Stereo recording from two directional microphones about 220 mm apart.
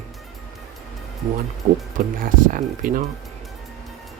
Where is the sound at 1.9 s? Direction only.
40° right (ahead or behind).